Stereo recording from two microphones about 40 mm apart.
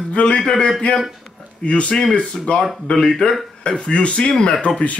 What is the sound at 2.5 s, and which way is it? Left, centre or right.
Speech, left.